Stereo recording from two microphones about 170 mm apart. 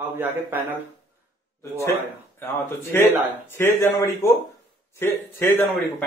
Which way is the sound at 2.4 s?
15° left (ahead or behind).